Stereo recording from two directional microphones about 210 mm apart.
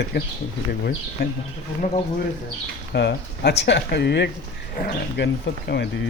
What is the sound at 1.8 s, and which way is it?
Speech, 35° left (ahead or behind).